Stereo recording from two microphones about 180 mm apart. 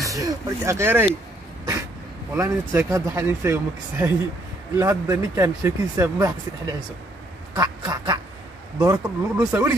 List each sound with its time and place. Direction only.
0.0 s speech: 20° right (ahead or behind)
2.3 s speech: 15° right (ahead or behind)
7.5 s quack: 20° right (ahead or behind)
8.8 s speech: 15° right (ahead or behind)